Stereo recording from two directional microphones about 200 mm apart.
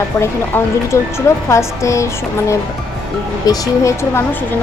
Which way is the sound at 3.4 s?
20° left (ahead or behind).